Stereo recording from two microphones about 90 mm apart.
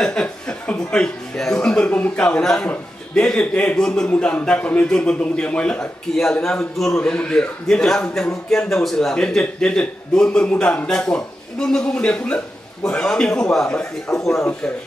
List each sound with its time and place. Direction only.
0.0 s a man's voice: 10° left (ahead or behind)